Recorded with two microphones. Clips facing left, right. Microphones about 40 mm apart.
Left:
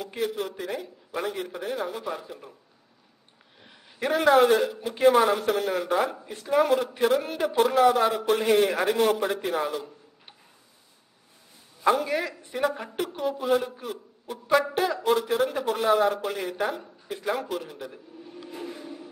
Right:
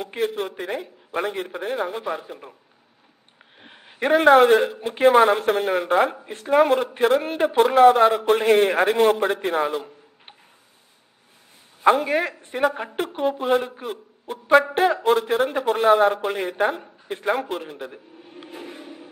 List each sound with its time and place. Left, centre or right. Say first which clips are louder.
0.0 s speech: right 4 dB; right
3.5 s speech: right 5 dB; right
11.8 s speech: right 5 dB; right
18.7 s a sound: even; right